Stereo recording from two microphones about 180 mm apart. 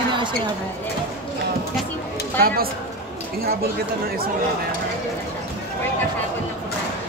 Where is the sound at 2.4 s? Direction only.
55° right (ahead or behind).